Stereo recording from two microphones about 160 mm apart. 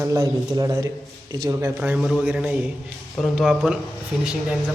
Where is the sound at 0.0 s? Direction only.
20° right (ahead or behind).